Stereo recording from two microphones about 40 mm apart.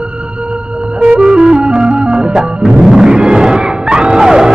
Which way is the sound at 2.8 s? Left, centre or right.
Centre.